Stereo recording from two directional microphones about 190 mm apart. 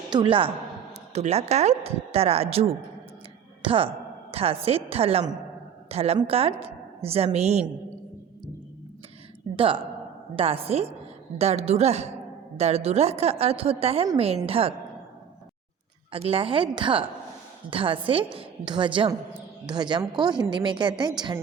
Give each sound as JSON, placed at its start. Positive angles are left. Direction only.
{"t": 0.1, "sound": "a woman's voice", "side_deg": -25}
{"t": 9.6, "sound": "a woman's voice", "side_deg": -25}
{"t": 16.1, "sound": "a woman's voice", "side_deg": -30}